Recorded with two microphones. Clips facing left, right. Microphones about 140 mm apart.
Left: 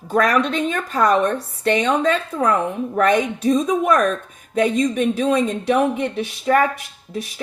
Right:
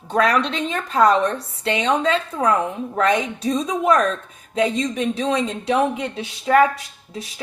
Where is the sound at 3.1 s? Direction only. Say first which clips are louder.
Left 4 dB; 50° left (ahead or behind).